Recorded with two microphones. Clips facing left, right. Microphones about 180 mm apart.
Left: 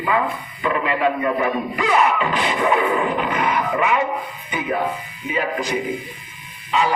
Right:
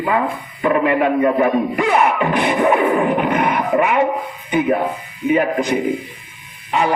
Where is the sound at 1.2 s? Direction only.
40° right (ahead or behind).